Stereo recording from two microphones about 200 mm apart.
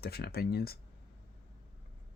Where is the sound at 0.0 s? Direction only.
50° left (ahead or behind).